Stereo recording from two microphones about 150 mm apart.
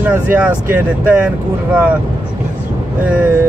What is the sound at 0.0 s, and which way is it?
Speech, 10° right (ahead or behind).